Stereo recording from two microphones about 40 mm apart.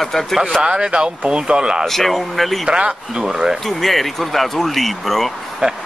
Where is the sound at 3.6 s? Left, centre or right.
Centre.